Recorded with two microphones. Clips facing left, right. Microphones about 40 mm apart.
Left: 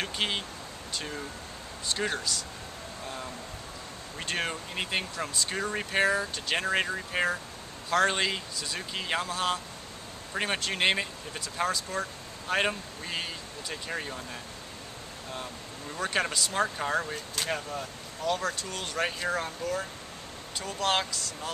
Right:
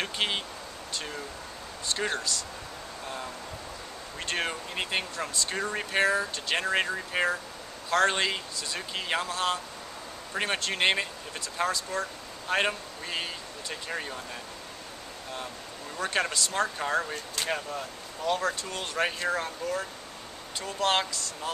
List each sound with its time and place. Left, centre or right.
0.0 s speech: centre
4.2 s speech: centre
16.0 s speech: centre